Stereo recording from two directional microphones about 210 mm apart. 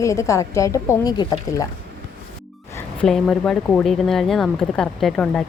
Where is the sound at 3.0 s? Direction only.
5° left (ahead or behind).